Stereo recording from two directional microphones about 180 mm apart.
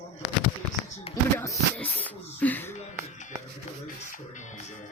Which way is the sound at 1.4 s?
10° left (ahead or behind).